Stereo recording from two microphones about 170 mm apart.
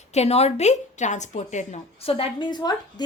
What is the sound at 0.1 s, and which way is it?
A woman's voice, 40° left (ahead or behind).